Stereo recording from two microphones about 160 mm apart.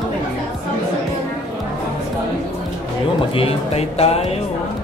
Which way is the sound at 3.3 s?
40° left (ahead or behind).